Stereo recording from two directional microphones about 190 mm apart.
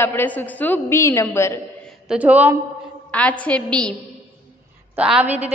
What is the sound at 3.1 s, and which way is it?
Speech, 5° left (ahead or behind).